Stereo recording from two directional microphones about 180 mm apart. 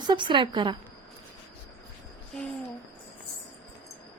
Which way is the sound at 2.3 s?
5° left (ahead or behind).